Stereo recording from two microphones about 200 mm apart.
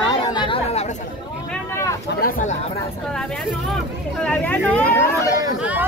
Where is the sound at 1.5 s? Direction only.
15° left (ahead or behind).